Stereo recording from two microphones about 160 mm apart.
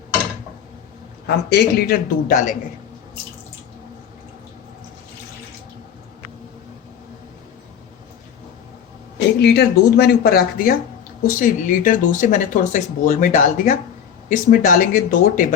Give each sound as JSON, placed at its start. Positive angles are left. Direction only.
{"t": 1.5, "sound": "a man's voice", "side_deg": 75}
{"t": 2.3, "sound": "a man's voice", "side_deg": 50}
{"t": 9.4, "sound": "speech", "side_deg": 90}